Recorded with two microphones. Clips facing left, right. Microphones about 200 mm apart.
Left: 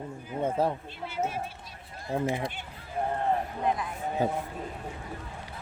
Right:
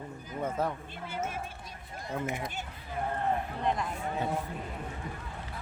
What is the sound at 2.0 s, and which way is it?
Speech, 30° left (ahead or behind).